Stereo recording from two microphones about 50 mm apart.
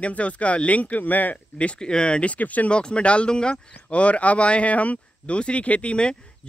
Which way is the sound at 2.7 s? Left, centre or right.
Left.